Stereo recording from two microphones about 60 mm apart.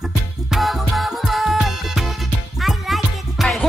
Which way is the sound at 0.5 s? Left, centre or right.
Centre.